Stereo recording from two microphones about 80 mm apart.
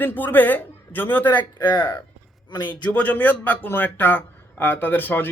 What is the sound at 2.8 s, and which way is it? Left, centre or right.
Speech, centre.